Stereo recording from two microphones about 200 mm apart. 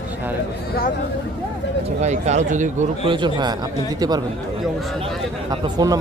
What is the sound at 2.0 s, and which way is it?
Speech, 35° right (ahead or behind).